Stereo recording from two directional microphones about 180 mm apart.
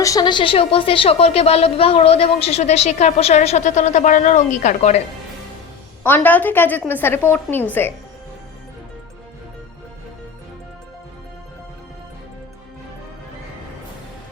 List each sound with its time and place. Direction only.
0.0 s a woman's voice: 20° left (ahead or behind); by 4.9 s 40° left (ahead or behind)
6.0 s a woman's voice: 10° left (ahead or behind)